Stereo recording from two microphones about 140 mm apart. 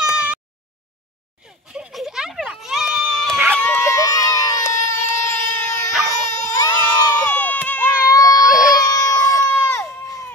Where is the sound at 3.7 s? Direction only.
20° left (ahead or behind).